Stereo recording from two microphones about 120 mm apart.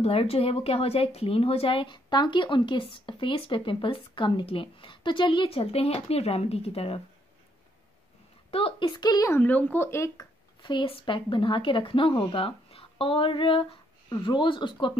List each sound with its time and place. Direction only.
0.0 s speech: 55° left (ahead or behind)
8.5 s speech: 50° left (ahead or behind); by 9.3 s 35° left (ahead or behind)
9.3 s speech: 15° left (ahead or behind)
10.6 s speech: 40° left (ahead or behind)